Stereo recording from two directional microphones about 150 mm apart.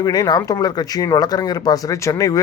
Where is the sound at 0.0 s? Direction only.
25° left (ahead or behind).